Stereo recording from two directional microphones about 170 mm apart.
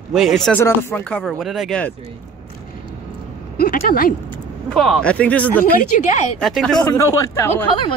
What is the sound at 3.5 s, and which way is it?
Speech, 65° left (ahead or behind).